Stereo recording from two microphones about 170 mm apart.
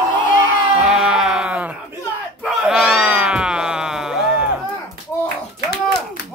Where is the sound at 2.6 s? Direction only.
Centre (ahead or behind).